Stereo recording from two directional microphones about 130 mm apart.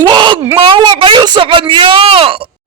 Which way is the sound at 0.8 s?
40° right (ahead or behind).